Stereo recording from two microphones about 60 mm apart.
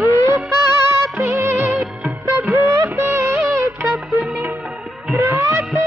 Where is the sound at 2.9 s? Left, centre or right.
Right.